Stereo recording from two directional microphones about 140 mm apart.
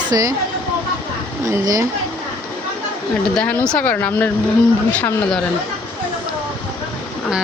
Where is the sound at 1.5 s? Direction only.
25° right (ahead or behind).